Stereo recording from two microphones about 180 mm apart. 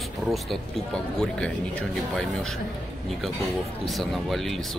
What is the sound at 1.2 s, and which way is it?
Speech, 5° left (ahead or behind).